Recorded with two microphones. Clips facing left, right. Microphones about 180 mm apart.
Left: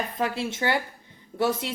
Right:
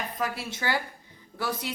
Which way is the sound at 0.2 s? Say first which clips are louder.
Left 5 dB; 25° left (ahead or behind).